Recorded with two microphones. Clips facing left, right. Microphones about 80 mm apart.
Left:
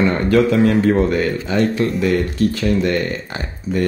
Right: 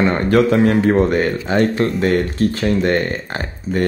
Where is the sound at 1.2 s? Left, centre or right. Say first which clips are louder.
Right 1 dB; right.